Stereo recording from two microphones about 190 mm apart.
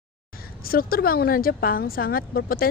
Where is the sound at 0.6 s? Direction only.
50° left (ahead or behind).